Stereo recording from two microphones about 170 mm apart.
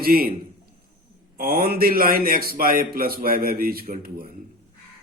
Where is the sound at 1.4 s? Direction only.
60° right (ahead or behind).